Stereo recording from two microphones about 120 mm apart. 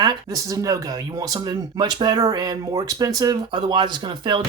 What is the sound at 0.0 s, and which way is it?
Speech, 30° right (ahead or behind).